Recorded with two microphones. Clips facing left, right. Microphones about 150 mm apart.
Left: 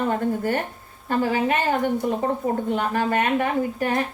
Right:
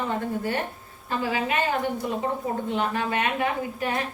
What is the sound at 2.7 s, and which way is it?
A woman's voice, 45° left (ahead or behind).